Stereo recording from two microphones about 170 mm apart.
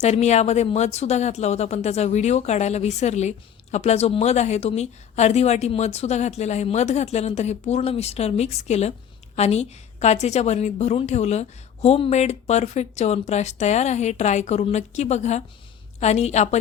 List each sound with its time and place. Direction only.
0.0 s speech: 40° left (ahead or behind)